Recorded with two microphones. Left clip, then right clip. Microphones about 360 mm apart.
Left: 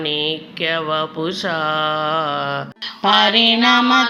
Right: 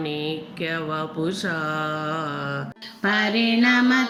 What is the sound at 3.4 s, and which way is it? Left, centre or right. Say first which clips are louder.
Music: left 6 dB; left.